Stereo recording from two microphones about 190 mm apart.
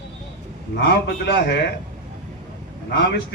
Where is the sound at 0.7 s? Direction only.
65° left (ahead or behind).